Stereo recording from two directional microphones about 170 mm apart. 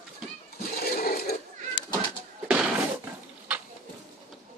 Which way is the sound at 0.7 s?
60° left (ahead or behind).